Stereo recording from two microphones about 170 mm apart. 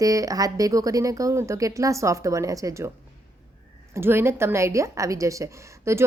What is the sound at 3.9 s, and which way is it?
Speech, 15° right (ahead or behind).